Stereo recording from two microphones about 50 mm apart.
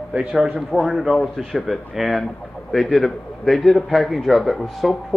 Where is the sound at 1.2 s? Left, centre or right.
Centre.